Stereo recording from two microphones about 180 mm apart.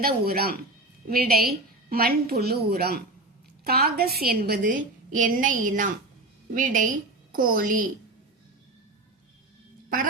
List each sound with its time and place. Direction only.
0.0 s a woman's voice: 55° right (ahead or behind)